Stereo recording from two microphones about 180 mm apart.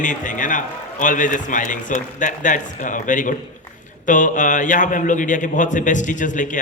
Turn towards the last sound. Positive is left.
turn(degrees=45)  # may be behind; listen again after turning